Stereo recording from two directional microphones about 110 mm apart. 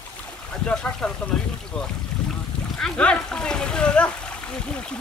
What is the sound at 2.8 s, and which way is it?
Speech, 10° left (ahead or behind).